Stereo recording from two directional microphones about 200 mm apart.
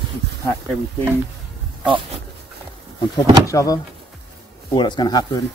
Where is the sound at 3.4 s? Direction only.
15° left (ahead or behind).